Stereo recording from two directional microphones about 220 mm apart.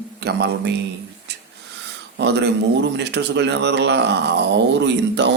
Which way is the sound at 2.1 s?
50° right (ahead or behind).